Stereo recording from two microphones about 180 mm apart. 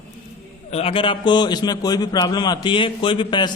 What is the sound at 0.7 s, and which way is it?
A man's voice, 35° left (ahead or behind).